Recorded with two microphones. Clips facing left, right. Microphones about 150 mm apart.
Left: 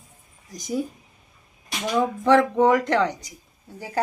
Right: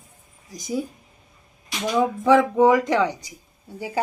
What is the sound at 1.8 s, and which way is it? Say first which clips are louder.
Speech: right 1 dB; 5° right (ahead or behind).